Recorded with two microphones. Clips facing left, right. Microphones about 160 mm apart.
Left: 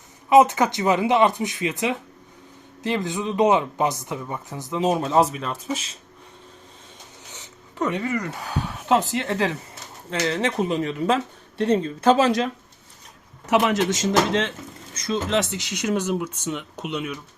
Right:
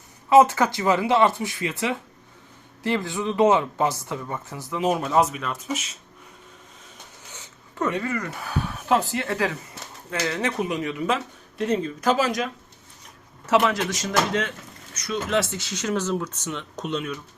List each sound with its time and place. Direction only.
0.3 s speech: 20° left (ahead or behind)
7.3 s speech: 15° left (ahead or behind)
13.5 s speech: 15° left (ahead or behind)